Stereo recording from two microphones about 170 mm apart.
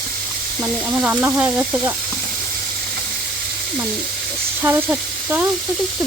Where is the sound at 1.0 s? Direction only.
10° right (ahead or behind).